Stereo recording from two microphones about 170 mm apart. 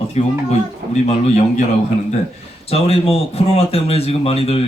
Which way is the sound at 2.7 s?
35° left (ahead or behind).